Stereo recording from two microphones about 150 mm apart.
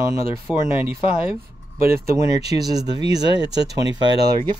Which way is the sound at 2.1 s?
20° right (ahead or behind).